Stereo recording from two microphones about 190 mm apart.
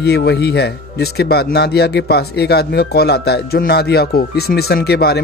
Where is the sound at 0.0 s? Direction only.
60° left (ahead or behind).